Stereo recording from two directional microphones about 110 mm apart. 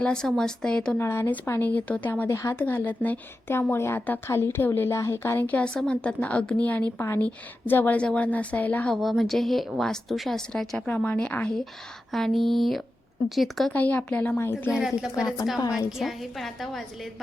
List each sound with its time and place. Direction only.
0.0 s a woman's voice: 5° left (ahead or behind)
0.9 s a woman's voice: 20° left (ahead or behind)
9.0 s a woman's voice: centre (ahead or behind)
13.7 s a woman's voice: 15° left (ahead or behind)
14.7 s a woman's voice: 5° right (ahead or behind)
15.5 s a woman's voice: 30° left (ahead or behind)
15.9 s a woman's voice: centre (ahead or behind)